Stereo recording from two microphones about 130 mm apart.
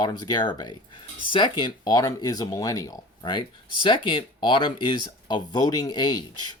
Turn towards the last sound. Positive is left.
turn(degrees=30)  # may be behind; listen again after turning